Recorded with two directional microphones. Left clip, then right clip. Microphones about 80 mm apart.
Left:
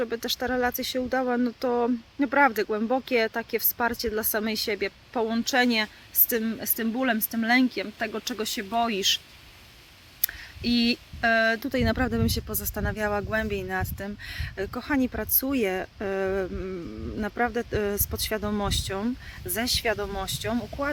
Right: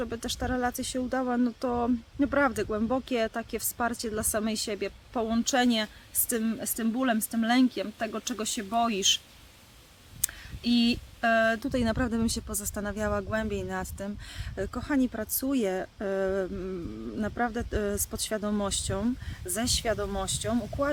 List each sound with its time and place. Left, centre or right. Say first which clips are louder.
0.0 s speech: left 5 dB; right
5.3 s speech: left 2 dB; right
10.2 s a sound: left 2 dB; right
11.6 s speech: left 3 dB; right
19.5 s speech: left 3 dB; right
19.8 s speech: left 2 dB; right